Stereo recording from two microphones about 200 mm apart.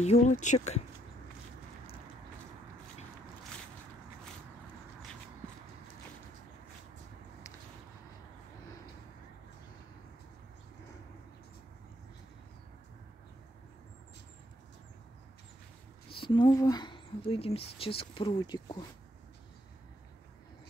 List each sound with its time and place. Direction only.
0.0 s speech: 35° left (ahead or behind)
16.1 s speech: 25° left (ahead or behind)